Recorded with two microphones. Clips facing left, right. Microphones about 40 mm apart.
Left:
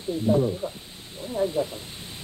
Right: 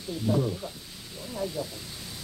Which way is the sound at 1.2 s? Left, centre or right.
Left.